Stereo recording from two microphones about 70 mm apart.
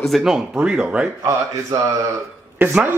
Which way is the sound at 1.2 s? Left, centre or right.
Right.